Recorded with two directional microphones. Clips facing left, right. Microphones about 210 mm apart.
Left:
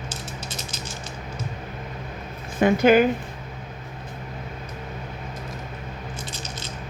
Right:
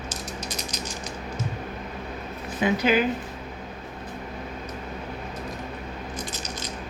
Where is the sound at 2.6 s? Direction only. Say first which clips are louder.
Left 6 dB; 50° left (ahead or behind).